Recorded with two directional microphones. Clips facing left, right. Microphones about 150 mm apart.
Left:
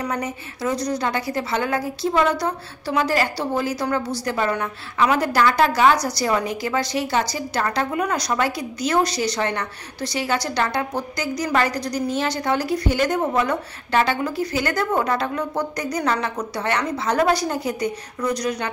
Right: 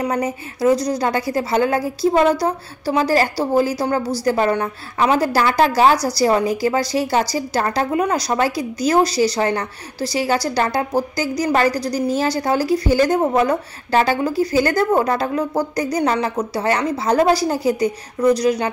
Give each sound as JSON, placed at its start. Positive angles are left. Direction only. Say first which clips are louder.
{"t": 0.0, "sound": "a woman's voice", "louder": "right 5 dB", "side_deg": -30}